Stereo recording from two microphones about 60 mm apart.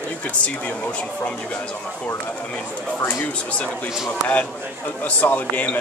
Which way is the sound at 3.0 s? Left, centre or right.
Left.